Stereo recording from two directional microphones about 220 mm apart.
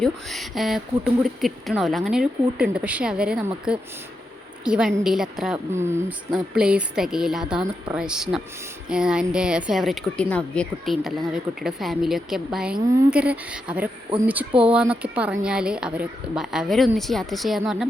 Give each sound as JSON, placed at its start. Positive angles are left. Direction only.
{"t": 0.0, "sound": "speech", "side_deg": 0}
{"t": 4.6, "sound": "speech", "side_deg": -5}
{"t": 14.1, "sound": "speech", "side_deg": -25}
{"t": 14.6, "sound": "speech", "side_deg": -5}